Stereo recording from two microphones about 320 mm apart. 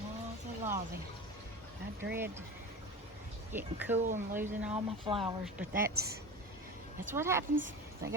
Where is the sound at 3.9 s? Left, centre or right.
Right.